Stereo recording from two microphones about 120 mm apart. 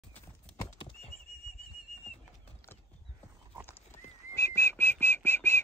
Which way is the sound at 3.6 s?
20° left (ahead or behind).